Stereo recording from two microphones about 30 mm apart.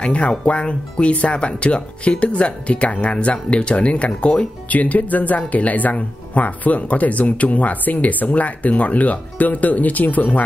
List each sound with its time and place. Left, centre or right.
0.0 s speech: left
4.6 s speech: left